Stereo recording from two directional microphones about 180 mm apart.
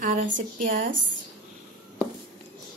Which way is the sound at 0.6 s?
50° right (ahead or behind).